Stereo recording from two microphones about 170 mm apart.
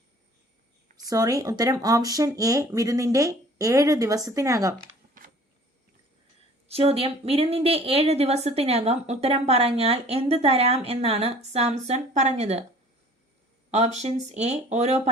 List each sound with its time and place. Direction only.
0.9 s speech: 20° right (ahead or behind)
6.7 s speech: 35° right (ahead or behind)
13.7 s speech: 40° right (ahead or behind)